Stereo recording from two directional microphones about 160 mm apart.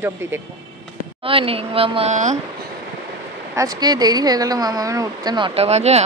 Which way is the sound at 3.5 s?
20° right (ahead or behind).